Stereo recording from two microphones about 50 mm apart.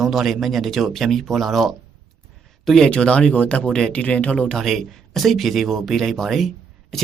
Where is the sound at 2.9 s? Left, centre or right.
Left.